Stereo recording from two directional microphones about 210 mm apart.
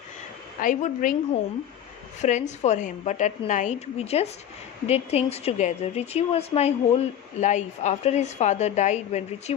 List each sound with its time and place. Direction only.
0.6 s a woman's voice: 40° left (ahead or behind)
2.2 s a woman's voice: 35° left (ahead or behind)